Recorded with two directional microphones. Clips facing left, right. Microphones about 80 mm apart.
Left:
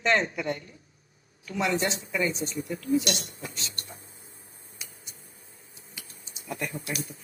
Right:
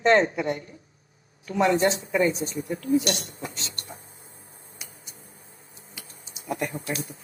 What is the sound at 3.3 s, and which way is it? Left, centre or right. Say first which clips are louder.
Speech: right 3 dB; right.